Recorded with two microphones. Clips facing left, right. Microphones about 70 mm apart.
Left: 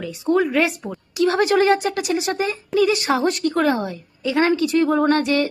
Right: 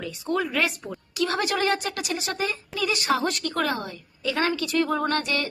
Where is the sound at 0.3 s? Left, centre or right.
Left.